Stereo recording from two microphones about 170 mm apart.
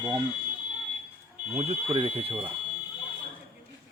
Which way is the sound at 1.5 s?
40° right (ahead or behind).